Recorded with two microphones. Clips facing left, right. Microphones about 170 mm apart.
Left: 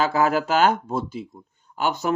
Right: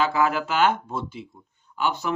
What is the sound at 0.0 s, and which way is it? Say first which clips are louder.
Speech: left 2 dB; 40° left (ahead or behind).